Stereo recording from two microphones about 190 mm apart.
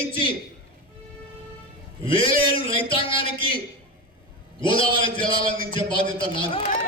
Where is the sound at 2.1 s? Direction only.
30° left (ahead or behind).